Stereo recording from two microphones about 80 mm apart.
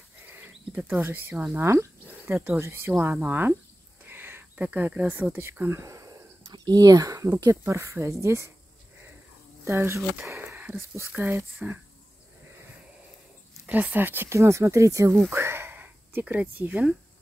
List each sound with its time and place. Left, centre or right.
0.7 s speech: right
4.0 s a sound: right
7.6 s speech: right
9.7 s speech: right
13.7 s speech: right
15.2 s a sound: right